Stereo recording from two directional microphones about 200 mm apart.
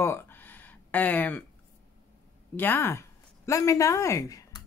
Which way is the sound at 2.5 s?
10° left (ahead or behind).